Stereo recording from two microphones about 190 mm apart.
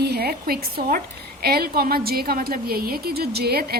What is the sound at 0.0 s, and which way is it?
A woman's voice, 55° right (ahead or behind).